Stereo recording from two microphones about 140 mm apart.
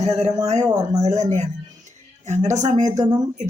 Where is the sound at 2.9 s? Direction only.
25° right (ahead or behind).